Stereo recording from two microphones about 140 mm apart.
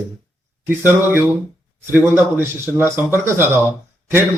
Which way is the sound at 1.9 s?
15° right (ahead or behind).